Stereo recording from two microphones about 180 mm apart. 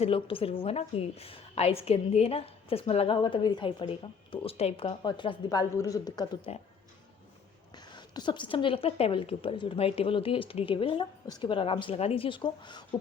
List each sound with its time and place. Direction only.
0.0 s a woman's voice: 30° left (ahead or behind)
7.9 s a woman's voice: 25° left (ahead or behind)